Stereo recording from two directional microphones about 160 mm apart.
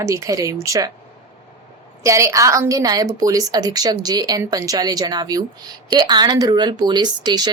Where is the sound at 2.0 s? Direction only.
20° right (ahead or behind).